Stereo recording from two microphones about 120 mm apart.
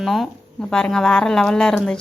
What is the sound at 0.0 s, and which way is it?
A woman's voice, centre (ahead or behind).